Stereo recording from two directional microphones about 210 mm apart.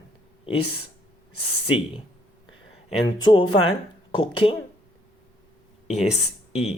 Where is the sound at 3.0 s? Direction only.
20° left (ahead or behind).